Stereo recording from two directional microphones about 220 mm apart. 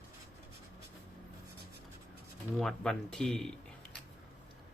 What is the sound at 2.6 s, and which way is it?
Speech, centre (ahead or behind).